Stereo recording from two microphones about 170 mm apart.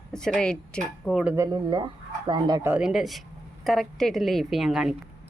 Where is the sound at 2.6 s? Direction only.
5° right (ahead or behind).